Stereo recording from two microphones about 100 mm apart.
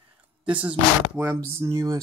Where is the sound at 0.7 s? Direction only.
20° right (ahead or behind).